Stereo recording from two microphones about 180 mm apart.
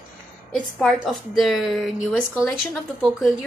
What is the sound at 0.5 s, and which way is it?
A woman's voice, centre (ahead or behind).